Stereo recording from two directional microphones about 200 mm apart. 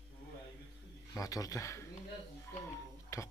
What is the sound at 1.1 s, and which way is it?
Speech, 15° left (ahead or behind).